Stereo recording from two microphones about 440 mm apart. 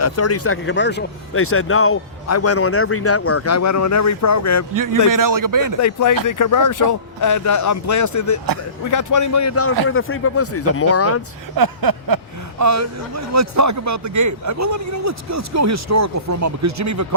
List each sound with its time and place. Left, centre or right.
0.0 s speech: left
4.7 s a man's voice: right
5.8 s speech: left
11.5 s speech: right